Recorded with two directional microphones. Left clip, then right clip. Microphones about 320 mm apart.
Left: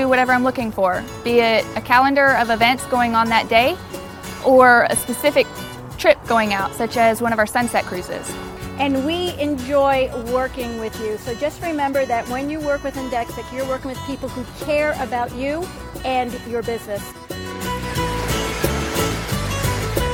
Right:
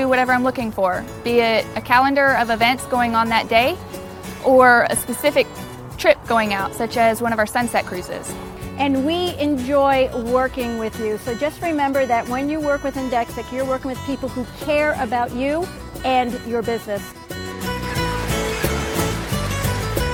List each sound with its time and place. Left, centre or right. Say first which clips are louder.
0.0 s speech: left 1 dB; centre
8.8 s speech: right 1 dB; right
14.7 s speech: right 1 dB; right
17.8 s music: even; centre